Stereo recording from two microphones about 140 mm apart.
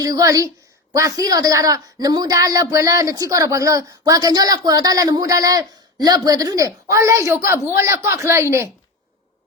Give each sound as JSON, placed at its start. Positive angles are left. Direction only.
{"t": 0.0, "sound": "a woman's voice", "side_deg": -25}